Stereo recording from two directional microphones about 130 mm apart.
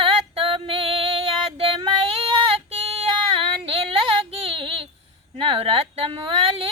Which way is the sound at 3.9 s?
45° right (ahead or behind).